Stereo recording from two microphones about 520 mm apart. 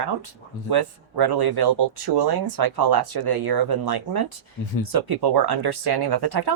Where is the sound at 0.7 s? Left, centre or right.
Right.